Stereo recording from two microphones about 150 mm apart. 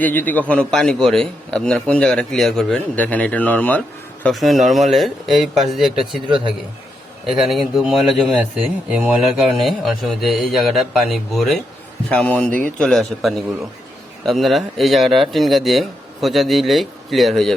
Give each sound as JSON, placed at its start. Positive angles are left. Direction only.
{"t": 0.0, "sound": "a man's voice", "side_deg": 10}
{"t": 6.2, "sound": "a man's voice", "side_deg": -30}
{"t": 7.3, "sound": "a man's voice", "side_deg": -5}